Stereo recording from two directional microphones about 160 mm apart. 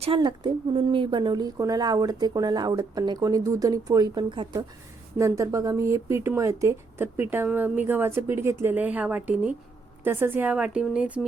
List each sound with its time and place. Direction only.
0.0 s a woman's voice: 30° right (ahead or behind)
5.1 s speech: 20° right (ahead or behind)